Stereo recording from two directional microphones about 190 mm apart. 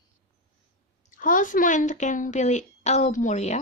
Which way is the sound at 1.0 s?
45° left (ahead or behind).